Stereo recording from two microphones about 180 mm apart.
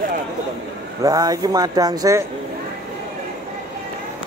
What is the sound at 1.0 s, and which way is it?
Speech, 20° right (ahead or behind).